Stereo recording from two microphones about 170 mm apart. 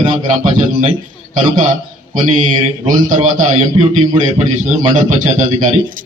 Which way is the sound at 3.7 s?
30° right (ahead or behind).